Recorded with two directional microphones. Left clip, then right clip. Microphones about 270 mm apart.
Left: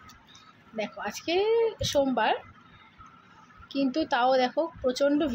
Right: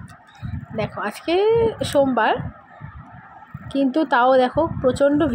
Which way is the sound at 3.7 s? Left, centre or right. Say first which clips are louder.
Right 8 dB; centre.